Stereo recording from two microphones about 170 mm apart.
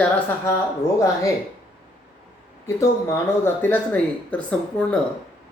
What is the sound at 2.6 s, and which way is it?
Speech, 15° left (ahead or behind).